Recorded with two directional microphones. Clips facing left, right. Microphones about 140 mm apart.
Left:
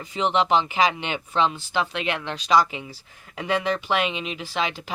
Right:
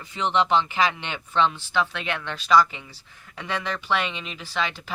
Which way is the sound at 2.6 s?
15° left (ahead or behind).